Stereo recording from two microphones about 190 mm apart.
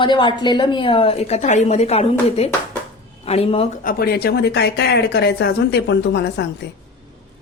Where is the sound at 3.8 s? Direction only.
55° left (ahead or behind).